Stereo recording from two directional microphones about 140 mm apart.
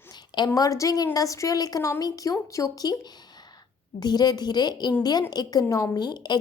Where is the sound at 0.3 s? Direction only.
30° left (ahead or behind).